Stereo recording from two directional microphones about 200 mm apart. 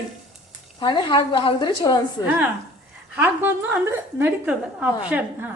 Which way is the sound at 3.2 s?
10° right (ahead or behind).